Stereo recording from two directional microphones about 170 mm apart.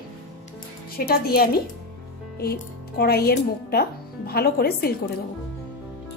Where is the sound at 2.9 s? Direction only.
65° left (ahead or behind).